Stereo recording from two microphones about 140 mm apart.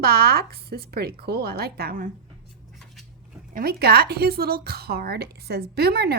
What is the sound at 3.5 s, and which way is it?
Speech, 90° right.